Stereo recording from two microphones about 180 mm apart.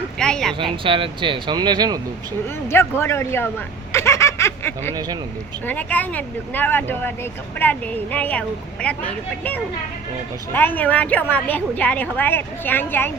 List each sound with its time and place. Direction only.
0.2 s a sound: 5° left (ahead or behind)
0.6 s speech: 30° right (ahead or behind)
2.6 s a woman's voice: 15° left (ahead or behind)
3.9 s snicker: 15° left (ahead or behind)
5.6 s a woman's voice: 10° left (ahead or behind)
10.5 s a woman's voice: 10° left (ahead or behind)